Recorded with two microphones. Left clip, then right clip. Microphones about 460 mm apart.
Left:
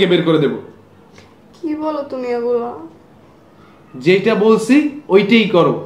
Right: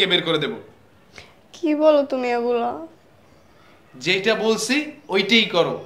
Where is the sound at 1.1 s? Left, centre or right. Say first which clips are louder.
Right 2 dB; right.